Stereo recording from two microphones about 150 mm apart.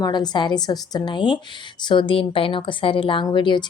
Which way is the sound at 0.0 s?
30° left (ahead or behind).